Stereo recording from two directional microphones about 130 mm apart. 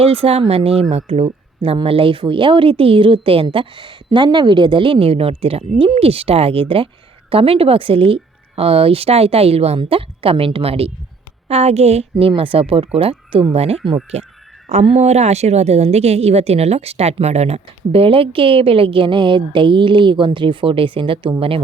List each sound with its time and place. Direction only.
0.0 s a woman's voice: 50° right (ahead or behind)
12.2 s a woman's voice: 45° right (ahead or behind)